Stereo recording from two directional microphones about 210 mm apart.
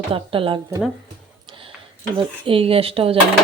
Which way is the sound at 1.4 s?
25° right (ahead or behind).